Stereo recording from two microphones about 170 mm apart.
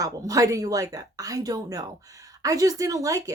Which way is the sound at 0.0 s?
20° right (ahead or behind).